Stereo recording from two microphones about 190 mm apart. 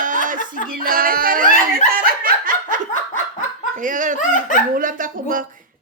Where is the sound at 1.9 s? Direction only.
50° right (ahead or behind).